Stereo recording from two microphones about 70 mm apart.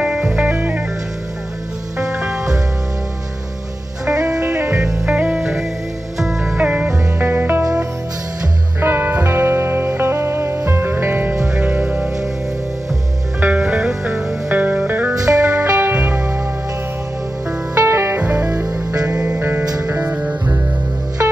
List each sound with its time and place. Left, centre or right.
0.0 s music: centre
0.4 s music: right
4.0 s music: right
4.6 s music: right
5.0 s music: centre
6.4 s music: right
8.8 s music: right
13.4 s music: centre
14.5 s music: right
17.8 s music: right
18.2 s music: centre
18.5 s music: right
19.0 s music: centre